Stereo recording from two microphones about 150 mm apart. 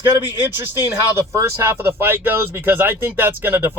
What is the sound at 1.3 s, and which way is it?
Speech, 20° right (ahead or behind).